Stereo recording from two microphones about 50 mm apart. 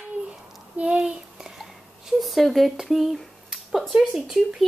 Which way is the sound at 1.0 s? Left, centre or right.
Centre.